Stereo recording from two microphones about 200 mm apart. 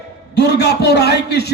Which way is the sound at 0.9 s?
55° left (ahead or behind).